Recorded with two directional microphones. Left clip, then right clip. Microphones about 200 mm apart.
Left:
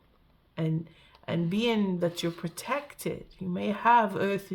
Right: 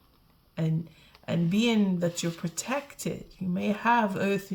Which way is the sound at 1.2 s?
25° left (ahead or behind).